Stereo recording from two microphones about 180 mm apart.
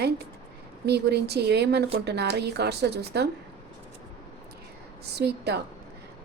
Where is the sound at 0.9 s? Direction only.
65° right (ahead or behind).